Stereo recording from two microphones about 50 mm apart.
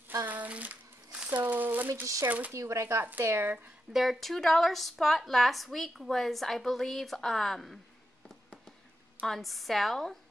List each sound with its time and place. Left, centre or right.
0.3 s a sound: right
2.2 s speech: right
2.5 s speech: right
3.3 s speech: right
3.9 s a woman's voice: centre
9.4 s a woman's voice: centre